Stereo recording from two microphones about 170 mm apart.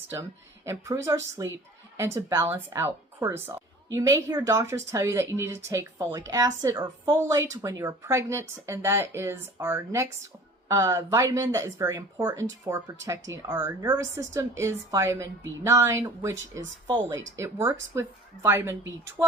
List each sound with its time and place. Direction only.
0.1 s speech: 15° right (ahead or behind)